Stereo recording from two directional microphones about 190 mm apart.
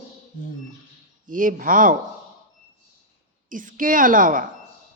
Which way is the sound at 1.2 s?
45° right (ahead or behind).